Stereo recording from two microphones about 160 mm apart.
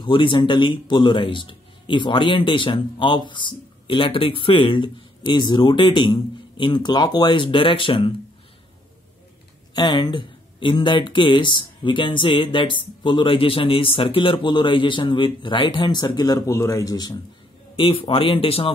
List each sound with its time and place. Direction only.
0.0 s speech: 30° left (ahead or behind)
9.8 s speech: 25° left (ahead or behind)
17.7 s speech: 35° left (ahead or behind)